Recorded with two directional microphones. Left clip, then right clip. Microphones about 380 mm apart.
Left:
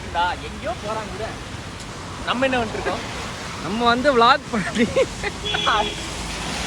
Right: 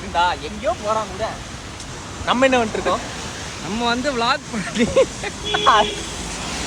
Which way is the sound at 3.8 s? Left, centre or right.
Centre.